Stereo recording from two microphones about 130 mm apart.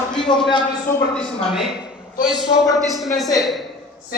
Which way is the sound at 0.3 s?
35° left (ahead or behind).